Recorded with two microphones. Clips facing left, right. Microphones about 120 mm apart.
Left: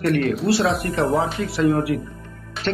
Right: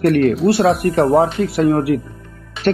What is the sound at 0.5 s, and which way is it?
Speech, 50° right (ahead or behind).